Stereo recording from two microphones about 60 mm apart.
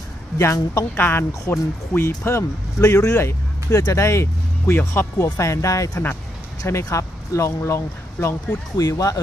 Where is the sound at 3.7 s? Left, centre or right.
Left.